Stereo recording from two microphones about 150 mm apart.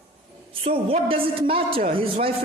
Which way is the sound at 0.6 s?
40° right (ahead or behind).